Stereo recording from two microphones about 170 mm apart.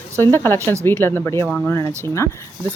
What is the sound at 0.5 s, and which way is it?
Speech, 15° right (ahead or behind).